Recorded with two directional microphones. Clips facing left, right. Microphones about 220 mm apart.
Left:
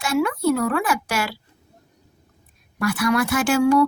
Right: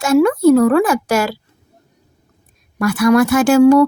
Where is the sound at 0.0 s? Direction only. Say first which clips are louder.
Right 9 dB; 40° right (ahead or behind).